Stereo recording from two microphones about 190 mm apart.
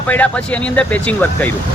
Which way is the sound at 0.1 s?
5° left (ahead or behind).